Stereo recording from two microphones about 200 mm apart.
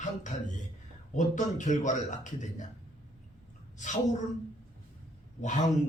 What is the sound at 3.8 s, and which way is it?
Speech, 40° left (ahead or behind).